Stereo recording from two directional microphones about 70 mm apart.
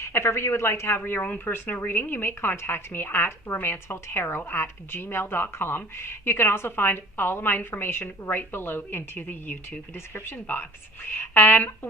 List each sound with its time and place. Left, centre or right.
0.0 s speech: left